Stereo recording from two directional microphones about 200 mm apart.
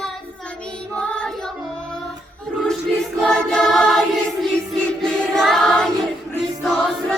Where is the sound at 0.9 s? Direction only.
5° left (ahead or behind).